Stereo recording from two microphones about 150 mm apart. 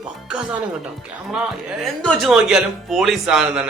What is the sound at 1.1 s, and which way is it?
Speech, 5° right (ahead or behind).